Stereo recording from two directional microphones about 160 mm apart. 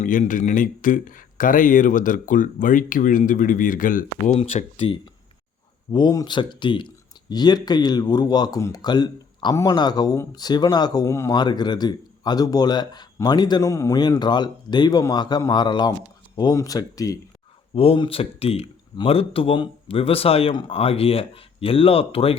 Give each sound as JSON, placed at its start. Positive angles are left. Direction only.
{"t": 0.0, "sound": "speech", "side_deg": 55}
{"t": 4.4, "sound": "speech", "side_deg": 35}
{"t": 5.9, "sound": "speech", "side_deg": 25}
{"t": 17.7, "sound": "speech", "side_deg": 35}